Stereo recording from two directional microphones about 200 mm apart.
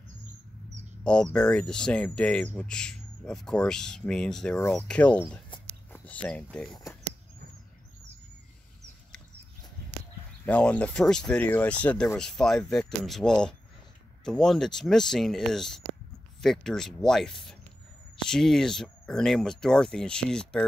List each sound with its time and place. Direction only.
1.0 s speech: 5° left (ahead or behind)
6.7 s speech: 15° left (ahead or behind)
10.4 s speech: 5° left (ahead or behind)